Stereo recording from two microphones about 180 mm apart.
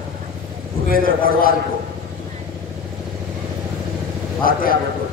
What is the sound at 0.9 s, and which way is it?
Speech, 50° left (ahead or behind).